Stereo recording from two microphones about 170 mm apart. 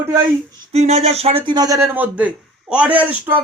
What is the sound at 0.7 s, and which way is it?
A man's voice, 40° right (ahead or behind).